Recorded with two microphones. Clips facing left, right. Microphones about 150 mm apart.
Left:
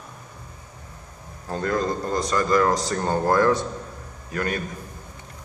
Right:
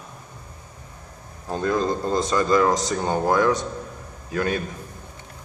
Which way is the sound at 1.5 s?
20° right (ahead or behind).